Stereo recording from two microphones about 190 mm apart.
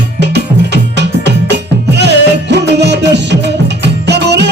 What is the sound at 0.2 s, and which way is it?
Music, 65° right (ahead or behind).